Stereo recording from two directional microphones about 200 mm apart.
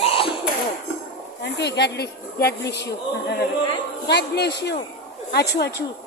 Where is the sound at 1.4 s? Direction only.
60° left (ahead or behind).